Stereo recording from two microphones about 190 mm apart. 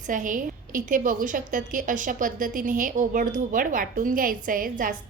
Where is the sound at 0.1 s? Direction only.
45° right (ahead or behind).